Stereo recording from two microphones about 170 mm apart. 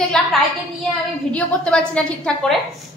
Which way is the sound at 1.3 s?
5° left (ahead or behind).